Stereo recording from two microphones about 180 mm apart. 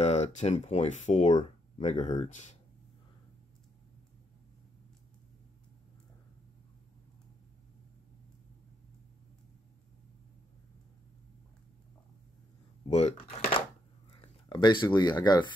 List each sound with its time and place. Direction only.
0.0 s speech: 40° left (ahead or behind)
12.9 s speech: 35° left (ahead or behind)
14.5 s speech: 25° left (ahead or behind)